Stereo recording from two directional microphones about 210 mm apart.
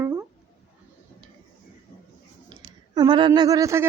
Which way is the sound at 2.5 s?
20° right (ahead or behind).